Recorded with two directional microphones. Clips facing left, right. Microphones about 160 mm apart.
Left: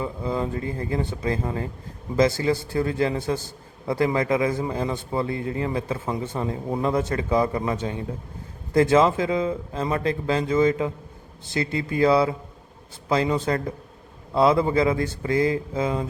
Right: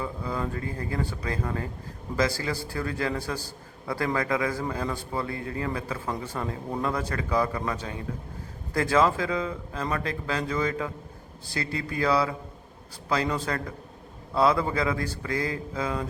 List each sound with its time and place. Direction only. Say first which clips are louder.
0.0 s a man's voice: left 4 dB; 25° left (ahead or behind)
13.4 s a man's voice: left 6 dB; 25° left (ahead or behind)